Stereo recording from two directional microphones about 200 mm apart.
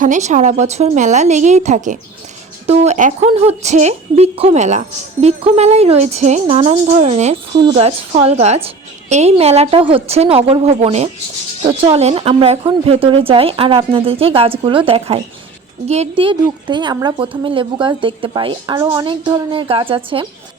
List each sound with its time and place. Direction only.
0.0 s a woman's voice: 35° right (ahead or behind)